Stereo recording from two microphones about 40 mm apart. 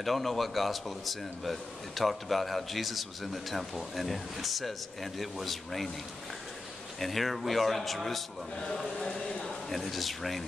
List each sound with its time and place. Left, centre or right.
0.0 s a man's voice: centre
7.0 s a man's voice: centre
8.5 s speech: centre
8.9 s a sound: centre
9.7 s a man's voice: centre